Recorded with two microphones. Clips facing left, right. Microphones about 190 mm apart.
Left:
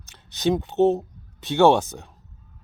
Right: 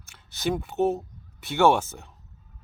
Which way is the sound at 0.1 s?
20° left (ahead or behind).